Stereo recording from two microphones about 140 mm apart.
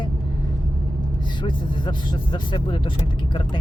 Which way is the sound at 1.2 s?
35° left (ahead or behind).